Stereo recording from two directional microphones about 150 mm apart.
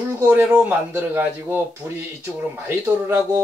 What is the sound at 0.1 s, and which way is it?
Speech, 15° right (ahead or behind).